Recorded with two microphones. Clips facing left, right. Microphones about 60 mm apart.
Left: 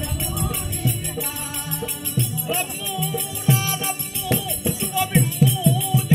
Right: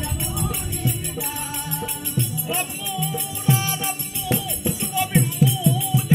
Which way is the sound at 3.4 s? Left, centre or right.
Centre.